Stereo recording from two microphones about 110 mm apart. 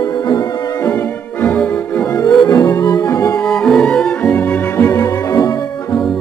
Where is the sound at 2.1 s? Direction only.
35° left (ahead or behind).